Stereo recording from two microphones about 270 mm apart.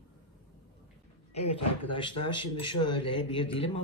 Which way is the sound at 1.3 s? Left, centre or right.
Left.